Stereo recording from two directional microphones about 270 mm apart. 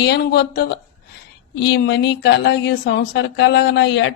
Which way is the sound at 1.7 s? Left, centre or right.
Left.